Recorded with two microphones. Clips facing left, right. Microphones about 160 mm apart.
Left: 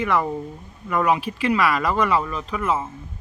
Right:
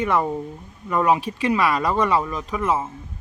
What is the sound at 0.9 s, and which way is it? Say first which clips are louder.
Speech: right 1 dB; 20° right (ahead or behind).